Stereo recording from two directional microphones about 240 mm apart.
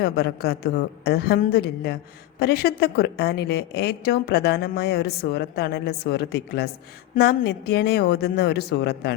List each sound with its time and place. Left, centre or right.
0.0 s a woman's voice: left